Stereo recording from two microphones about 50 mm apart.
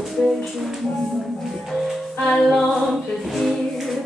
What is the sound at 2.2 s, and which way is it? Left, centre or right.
Music, centre.